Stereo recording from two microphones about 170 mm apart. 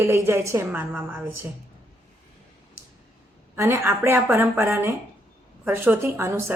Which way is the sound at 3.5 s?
15° right (ahead or behind).